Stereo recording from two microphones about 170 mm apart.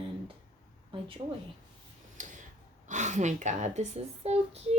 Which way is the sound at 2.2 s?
50° right (ahead or behind).